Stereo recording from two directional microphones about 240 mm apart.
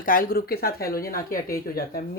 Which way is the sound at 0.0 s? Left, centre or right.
Left.